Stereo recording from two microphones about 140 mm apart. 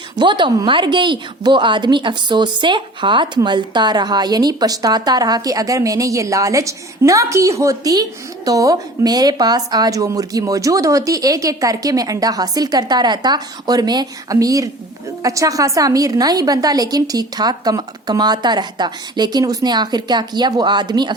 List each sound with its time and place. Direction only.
0.2 s speech: 35° right (ahead or behind)